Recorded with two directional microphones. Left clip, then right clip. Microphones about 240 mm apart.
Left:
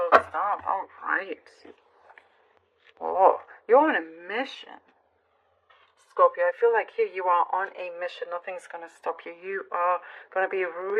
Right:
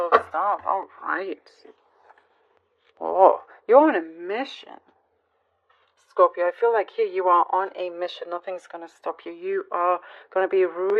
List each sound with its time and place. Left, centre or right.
0.0 s radio: right
3.0 s speech: right
6.1 s speech: right